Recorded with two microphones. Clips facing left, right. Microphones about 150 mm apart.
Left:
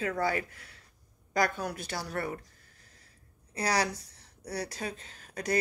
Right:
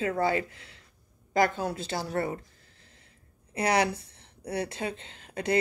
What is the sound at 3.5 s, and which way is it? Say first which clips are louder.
Speech: right 4 dB; 25° right (ahead or behind).